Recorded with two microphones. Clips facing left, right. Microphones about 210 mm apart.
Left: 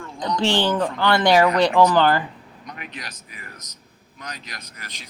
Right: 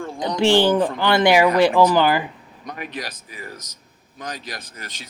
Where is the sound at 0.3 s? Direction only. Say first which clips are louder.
Right 5 dB; 10° right (ahead or behind).